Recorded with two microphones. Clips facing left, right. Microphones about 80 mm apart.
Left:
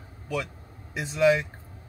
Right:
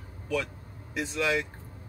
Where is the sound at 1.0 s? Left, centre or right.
Centre.